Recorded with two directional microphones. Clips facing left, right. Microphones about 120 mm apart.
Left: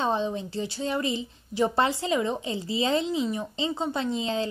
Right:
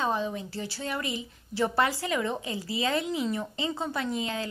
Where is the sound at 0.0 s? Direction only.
25° left (ahead or behind).